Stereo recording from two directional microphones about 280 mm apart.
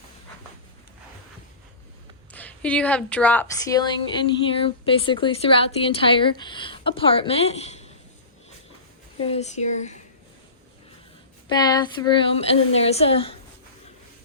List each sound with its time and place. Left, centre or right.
2.3 s a woman's voice: centre; by 7.9 s left
9.1 s a woman's voice: left
11.4 s a woman's voice: centre